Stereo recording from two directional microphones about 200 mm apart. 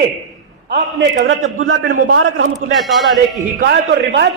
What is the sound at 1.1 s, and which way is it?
A man's voice, 65° right (ahead or behind).